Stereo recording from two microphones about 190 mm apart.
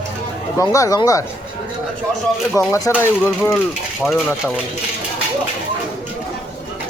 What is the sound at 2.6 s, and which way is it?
Speech, 15° left (ahead or behind).